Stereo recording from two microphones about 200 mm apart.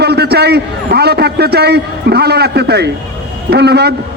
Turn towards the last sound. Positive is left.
turn(degrees=-55)  # may be behind; listen again after turning